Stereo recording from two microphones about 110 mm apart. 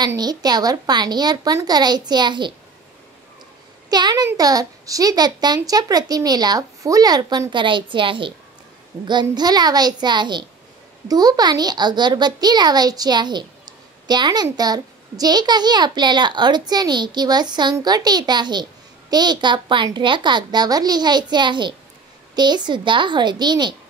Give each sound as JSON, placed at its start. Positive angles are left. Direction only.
{"t": 0.0, "sound": "a child's voice", "side_deg": -40}
{"t": 3.9, "sound": "a child's voice", "side_deg": -40}